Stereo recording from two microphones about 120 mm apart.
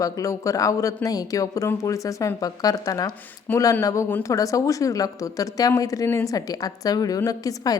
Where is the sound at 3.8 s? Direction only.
25° left (ahead or behind).